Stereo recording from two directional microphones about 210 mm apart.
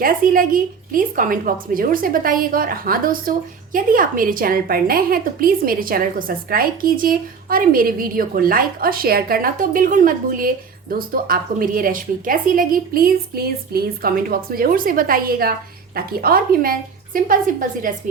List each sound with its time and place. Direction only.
0.0 s a woman's voice: 40° right (ahead or behind)